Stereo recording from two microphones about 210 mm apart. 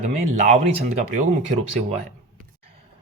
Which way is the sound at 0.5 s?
35° right (ahead or behind).